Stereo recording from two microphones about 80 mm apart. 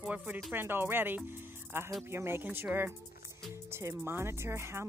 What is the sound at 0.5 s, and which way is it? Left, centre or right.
Speech, right.